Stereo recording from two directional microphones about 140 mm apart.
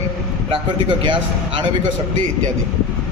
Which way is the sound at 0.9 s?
35° right (ahead or behind).